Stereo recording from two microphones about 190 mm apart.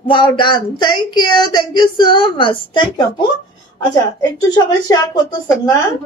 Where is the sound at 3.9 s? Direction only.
20° left (ahead or behind).